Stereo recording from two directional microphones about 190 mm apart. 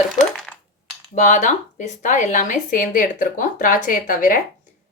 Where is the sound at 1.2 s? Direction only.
40° left (ahead or behind).